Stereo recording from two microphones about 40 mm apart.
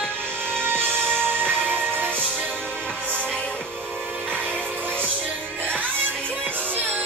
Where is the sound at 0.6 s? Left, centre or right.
Right.